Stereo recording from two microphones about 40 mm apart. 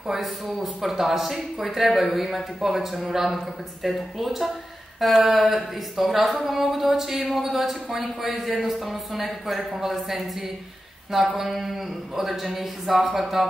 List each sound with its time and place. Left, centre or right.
0.1 s speech: centre
11.3 s speech: centre